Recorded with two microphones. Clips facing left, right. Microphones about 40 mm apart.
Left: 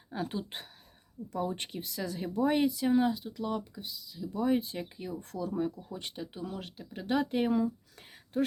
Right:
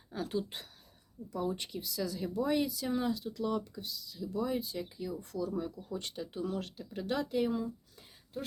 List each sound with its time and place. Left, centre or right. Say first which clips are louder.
0.1 s speech: even; left
1.3 s speech: left 1 dB; left; by 4.3 s centre
4.3 s speech: left 5 dB; left
5.9 s speech: right 1 dB; left
6.3 s speech: right 3 dB; centre
7.2 s speech: left 2 dB; left